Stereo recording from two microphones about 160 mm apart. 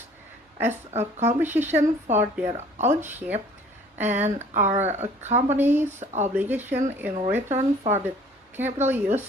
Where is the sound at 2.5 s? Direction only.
45° right (ahead or behind).